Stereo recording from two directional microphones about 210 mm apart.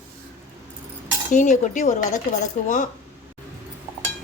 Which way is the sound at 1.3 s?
35° left (ahead or behind).